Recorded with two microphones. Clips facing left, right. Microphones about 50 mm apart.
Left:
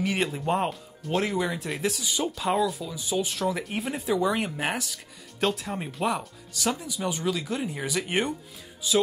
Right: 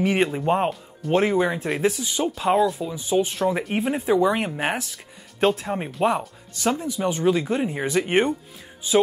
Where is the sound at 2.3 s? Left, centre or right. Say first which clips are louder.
Right 7 dB; centre.